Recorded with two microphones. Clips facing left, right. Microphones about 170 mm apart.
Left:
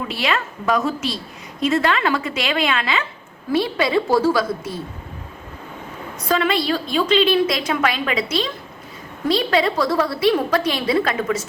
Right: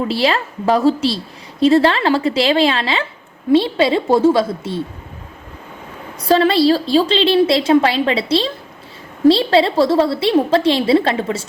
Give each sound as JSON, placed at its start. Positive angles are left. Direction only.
{"t": 0.1, "sound": "a woman's voice", "side_deg": -35}
{"t": 6.2, "sound": "a woman's voice", "side_deg": -35}